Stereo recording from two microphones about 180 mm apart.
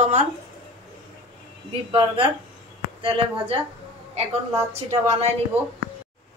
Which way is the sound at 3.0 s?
30° right (ahead or behind).